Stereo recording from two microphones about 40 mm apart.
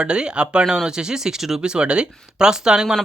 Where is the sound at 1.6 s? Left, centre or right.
Right.